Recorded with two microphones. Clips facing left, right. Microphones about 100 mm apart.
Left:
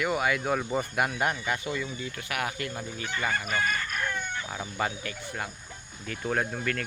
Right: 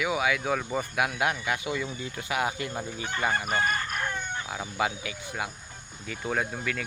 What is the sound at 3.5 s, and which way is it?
Chicken, 35° right (ahead or behind).